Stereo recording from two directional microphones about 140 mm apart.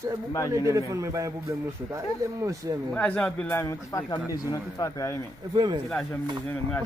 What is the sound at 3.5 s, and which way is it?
Speech, 20° left (ahead or behind).